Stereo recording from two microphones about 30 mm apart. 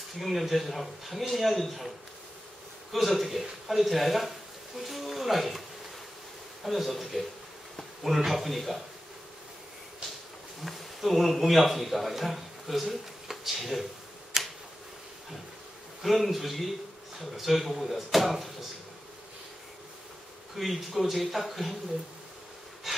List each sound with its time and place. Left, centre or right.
0.2 s speech: centre
2.9 s speech: centre
4.8 s a sound: centre
6.6 s speech: centre
8.3 s speech: centre
10.6 s a man's voice: centre
14.3 s a sound: centre
16.0 s speech: centre
20.5 s speech: centre
22.9 s bee: centre